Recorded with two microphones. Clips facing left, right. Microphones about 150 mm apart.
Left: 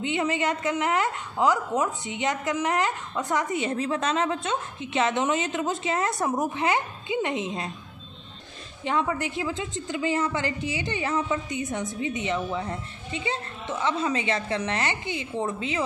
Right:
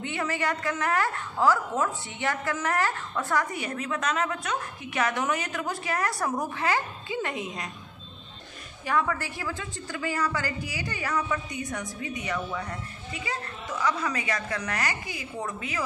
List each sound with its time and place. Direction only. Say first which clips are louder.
0.0 s a woman's voice: left 4 dB; 20° left (ahead or behind)
8.8 s a woman's voice: left 1 dB; 20° left (ahead or behind)